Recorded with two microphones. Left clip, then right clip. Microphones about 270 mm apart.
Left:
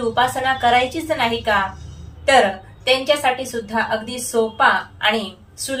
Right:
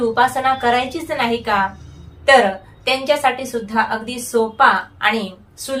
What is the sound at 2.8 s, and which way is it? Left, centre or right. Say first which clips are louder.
A woman's voice: even; centre.